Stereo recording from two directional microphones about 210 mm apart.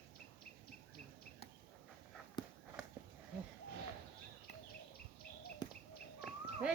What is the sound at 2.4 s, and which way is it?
Walk, 20° left (ahead or behind).